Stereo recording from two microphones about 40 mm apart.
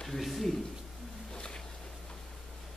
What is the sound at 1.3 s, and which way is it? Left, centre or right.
Music, left.